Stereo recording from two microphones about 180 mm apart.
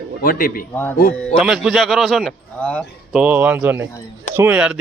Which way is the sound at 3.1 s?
5° right (ahead or behind).